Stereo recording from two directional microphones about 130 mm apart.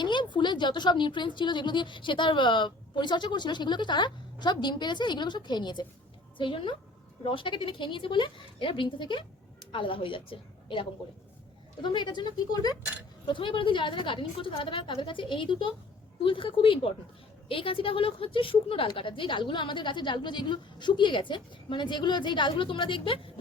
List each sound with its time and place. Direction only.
0.0 s a woman's voice: 35° left (ahead or behind)